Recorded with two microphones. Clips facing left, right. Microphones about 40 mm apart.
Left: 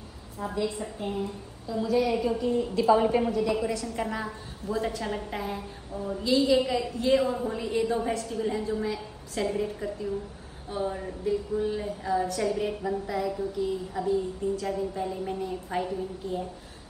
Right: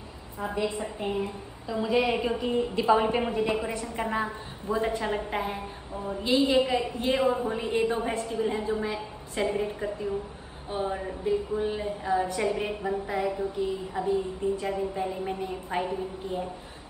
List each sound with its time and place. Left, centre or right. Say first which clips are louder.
0.4 s a woman's voice: right 1 dB; right
1.1 s a woman's voice: right 2 dB; right